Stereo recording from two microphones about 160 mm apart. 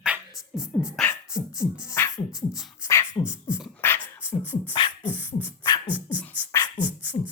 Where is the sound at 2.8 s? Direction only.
15° left (ahead or behind).